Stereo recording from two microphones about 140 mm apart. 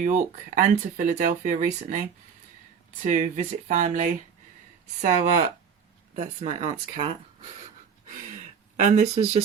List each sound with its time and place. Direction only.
0.0 s speech: 65° right (ahead or behind)
6.1 s speech: 45° right (ahead or behind)
8.0 s a sound: 65° right (ahead or behind)